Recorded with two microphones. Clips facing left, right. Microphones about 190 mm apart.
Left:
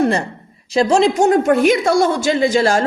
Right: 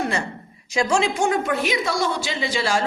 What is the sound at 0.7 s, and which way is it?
Speech, 35° left (ahead or behind).